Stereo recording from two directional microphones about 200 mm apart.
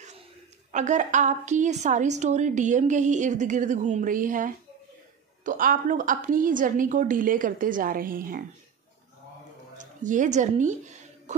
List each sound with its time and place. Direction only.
0.7 s a woman's voice: 35° right (ahead or behind)
9.8 s a woman's voice: 40° right (ahead or behind)
11.3 s music: 35° right (ahead or behind)